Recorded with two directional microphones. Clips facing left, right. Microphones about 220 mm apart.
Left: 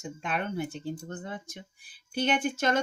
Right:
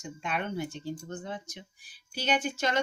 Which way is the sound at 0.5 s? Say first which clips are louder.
Left 1 dB; 55° left (ahead or behind).